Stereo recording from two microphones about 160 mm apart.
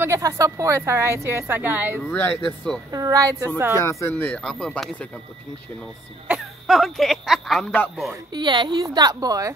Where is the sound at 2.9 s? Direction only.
20° right (ahead or behind).